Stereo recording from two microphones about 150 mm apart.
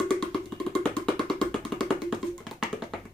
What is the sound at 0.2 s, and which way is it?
Music, 5° left (ahead or behind).